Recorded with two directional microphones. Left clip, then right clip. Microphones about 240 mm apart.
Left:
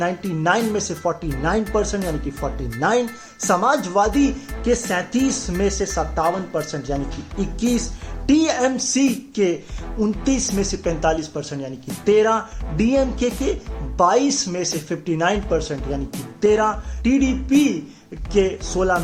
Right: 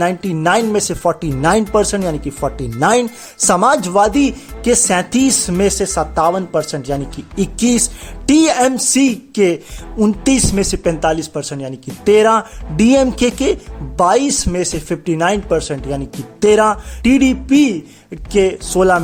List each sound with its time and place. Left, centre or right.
0.0 s speech: right